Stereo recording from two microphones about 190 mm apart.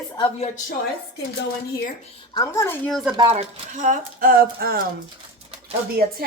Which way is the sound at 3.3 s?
45° right (ahead or behind).